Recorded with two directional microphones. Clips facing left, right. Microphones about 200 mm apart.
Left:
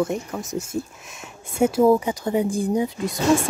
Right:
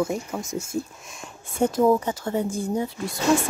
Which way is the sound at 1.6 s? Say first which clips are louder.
Left 3 dB; 10° left (ahead or behind).